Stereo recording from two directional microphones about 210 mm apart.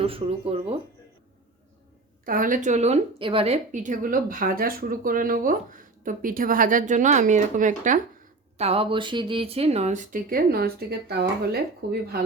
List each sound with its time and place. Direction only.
0.0 s speech: 25° right (ahead or behind)
2.2 s speech: 40° right (ahead or behind)